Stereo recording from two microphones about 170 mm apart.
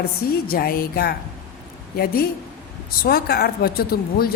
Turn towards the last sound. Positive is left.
turn(degrees=60)  # may be behind; listen again after turning